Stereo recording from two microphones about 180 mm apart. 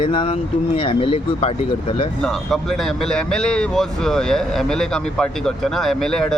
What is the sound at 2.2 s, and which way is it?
Speech, centre (ahead or behind).